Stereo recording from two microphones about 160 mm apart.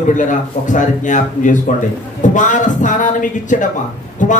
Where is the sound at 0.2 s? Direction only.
50° left (ahead or behind).